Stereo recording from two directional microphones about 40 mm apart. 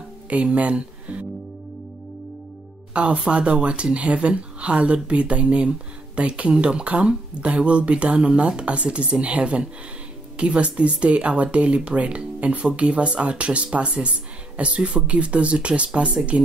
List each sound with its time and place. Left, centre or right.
0.3 s speech: right
2.9 s speech: right